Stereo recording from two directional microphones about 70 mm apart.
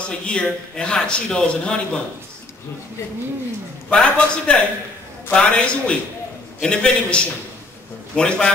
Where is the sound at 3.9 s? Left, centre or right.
Centre.